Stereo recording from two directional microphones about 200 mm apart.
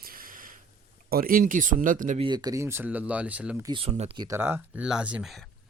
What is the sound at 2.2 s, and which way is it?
Speech, 20° right (ahead or behind).